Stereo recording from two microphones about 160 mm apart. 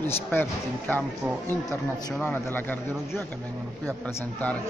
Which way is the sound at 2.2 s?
10° left (ahead or behind).